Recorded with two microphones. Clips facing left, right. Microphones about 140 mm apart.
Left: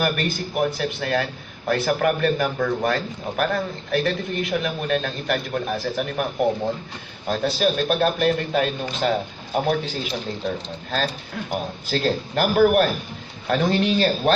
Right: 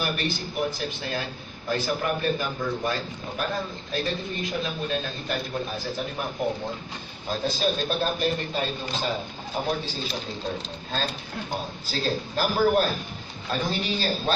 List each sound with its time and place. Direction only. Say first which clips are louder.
0.0 s a man's voice: left 5 dB; 60° left (ahead or behind)
7.2 s a man's voice: left 5 dB; 70° left (ahead or behind)
11.9 s a man's voice: left 5 dB; 65° left (ahead or behind)